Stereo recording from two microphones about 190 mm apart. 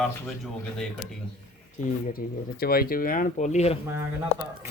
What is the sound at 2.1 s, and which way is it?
Speech, 50° left (ahead or behind).